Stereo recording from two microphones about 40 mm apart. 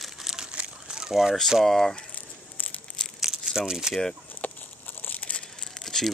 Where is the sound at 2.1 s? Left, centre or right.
Left.